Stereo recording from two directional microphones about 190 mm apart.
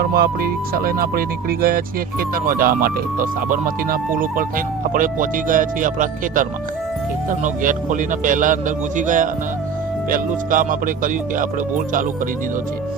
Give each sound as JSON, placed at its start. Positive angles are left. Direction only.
{"t": 0.0, "sound": "speech", "side_deg": -55}